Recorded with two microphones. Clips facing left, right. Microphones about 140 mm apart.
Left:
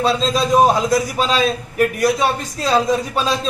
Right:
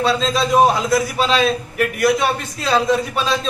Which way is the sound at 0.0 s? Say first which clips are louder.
Even; 40° left (ahead or behind).